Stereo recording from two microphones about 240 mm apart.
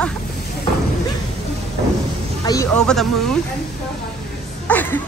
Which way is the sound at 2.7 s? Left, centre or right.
Centre.